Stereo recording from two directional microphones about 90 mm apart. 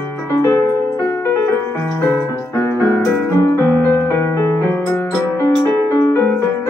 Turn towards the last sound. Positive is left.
turn(degrees=30)  # may be behind; listen again after turning